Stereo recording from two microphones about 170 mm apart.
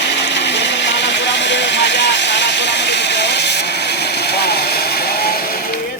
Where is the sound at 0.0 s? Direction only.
90° left.